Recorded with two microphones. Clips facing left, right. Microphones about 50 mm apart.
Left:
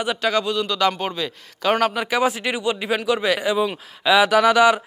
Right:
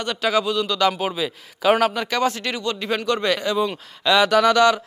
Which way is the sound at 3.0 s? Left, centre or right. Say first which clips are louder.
Right 1 dB; centre.